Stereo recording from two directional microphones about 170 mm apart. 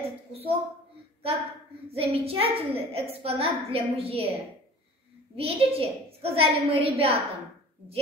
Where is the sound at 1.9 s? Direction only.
35° right (ahead or behind).